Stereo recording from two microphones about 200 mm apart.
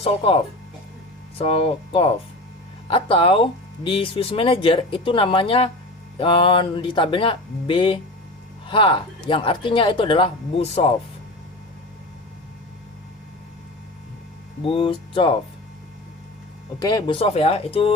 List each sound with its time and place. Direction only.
0.0 s speech: 30° left (ahead or behind)
14.6 s speech: 25° left (ahead or behind)
16.8 s speech: 20° left (ahead or behind)
17.2 s speech: 30° left (ahead or behind)